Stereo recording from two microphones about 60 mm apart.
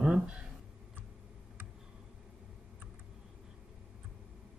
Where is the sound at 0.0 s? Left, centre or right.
Centre.